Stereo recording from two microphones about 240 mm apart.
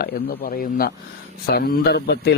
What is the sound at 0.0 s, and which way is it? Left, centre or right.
Speech, left.